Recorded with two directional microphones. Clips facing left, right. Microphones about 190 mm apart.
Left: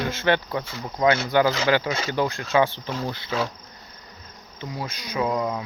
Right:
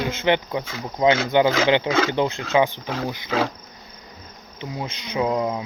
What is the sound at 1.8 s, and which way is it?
Speech, 90° right.